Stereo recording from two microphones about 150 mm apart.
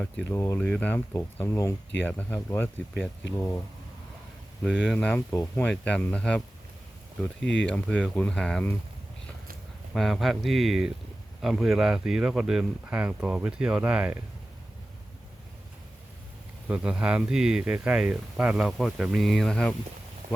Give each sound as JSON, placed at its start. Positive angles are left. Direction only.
{"t": 0.0, "sound": "speech", "side_deg": 5}
{"t": 0.3, "sound": "speech", "side_deg": 20}
{"t": 4.6, "sound": "speech", "side_deg": 0}
{"t": 4.9, "sound": "speech", "side_deg": 10}
{"t": 7.4, "sound": "speech", "side_deg": 5}
{"t": 9.9, "sound": "speech", "side_deg": 0}
{"t": 16.6, "sound": "speech", "side_deg": -5}